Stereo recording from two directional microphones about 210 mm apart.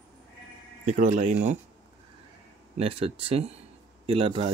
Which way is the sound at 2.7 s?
30° right (ahead or behind).